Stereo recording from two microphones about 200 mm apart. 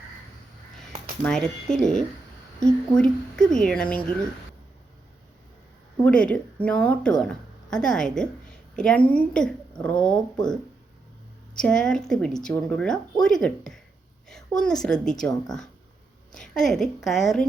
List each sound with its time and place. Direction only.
1.2 s a woman's voice: 5° left (ahead or behind)
6.0 s a woman's voice: 5° left (ahead or behind)
11.5 s a woman's voice: 5° left (ahead or behind)